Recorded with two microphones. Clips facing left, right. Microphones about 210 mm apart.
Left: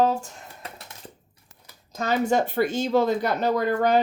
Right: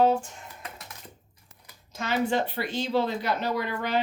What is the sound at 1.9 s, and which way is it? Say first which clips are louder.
Speech: left 4 dB; 40° left (ahead or behind).